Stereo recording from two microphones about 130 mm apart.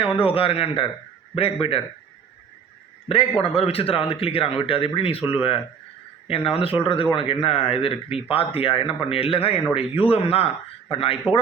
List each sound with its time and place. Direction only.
0.0 s speech: 45° left (ahead or behind)
3.1 s speech: 45° left (ahead or behind)